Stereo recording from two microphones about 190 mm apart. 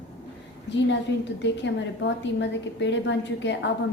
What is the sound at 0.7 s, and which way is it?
A woman's voice, 70° left (ahead or behind).